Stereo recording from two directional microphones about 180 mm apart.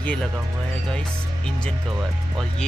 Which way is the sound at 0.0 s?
5° left (ahead or behind).